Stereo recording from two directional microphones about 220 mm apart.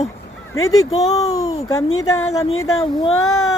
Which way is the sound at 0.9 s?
30° left (ahead or behind).